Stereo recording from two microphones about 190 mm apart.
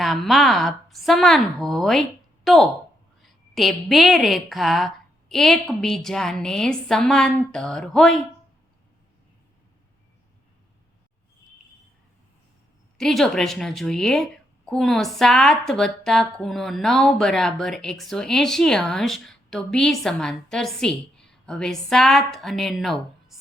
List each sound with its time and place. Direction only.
0.0 s a woman's voice: centre (ahead or behind)
13.0 s a woman's voice: centre (ahead or behind)